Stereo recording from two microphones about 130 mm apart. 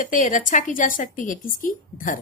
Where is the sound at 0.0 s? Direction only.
90° left.